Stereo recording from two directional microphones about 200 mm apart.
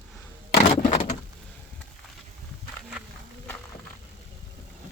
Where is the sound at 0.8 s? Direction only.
35° left (ahead or behind).